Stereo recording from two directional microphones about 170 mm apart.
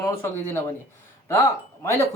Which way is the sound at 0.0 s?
15° left (ahead or behind).